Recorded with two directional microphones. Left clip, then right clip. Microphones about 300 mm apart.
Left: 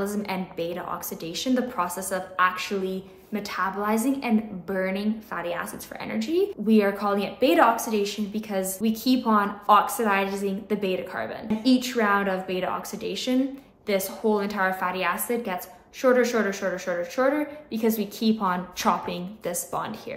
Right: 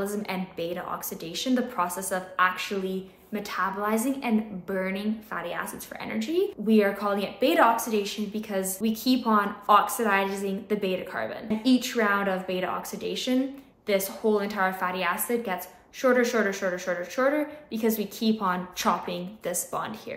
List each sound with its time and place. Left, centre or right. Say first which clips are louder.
0.0 s a woman's voice: left 2 dB; centre